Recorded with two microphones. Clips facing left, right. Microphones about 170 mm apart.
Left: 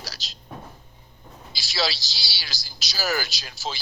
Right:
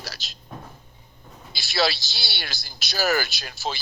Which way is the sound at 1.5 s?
60° right (ahead or behind).